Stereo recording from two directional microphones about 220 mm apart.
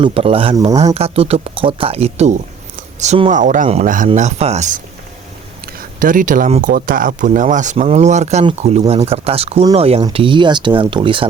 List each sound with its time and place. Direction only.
0.0 s speech: 25° right (ahead or behind)
6.0 s speech: 35° right (ahead or behind); by 11.3 s 20° right (ahead or behind)